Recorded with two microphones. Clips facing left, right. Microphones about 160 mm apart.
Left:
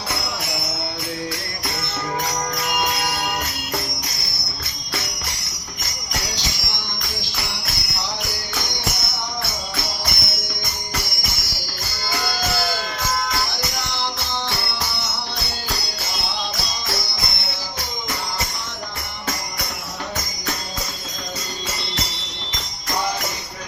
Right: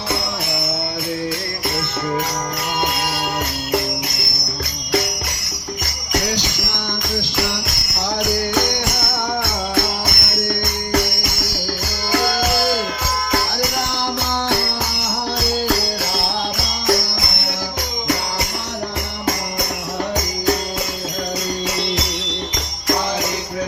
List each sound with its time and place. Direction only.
7.9 s music: 50° right (ahead or behind)
15.7 s music: 50° right (ahead or behind)